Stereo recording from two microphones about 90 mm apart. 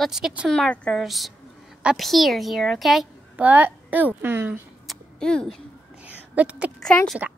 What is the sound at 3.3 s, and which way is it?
A woman's voice, 20° right (ahead or behind).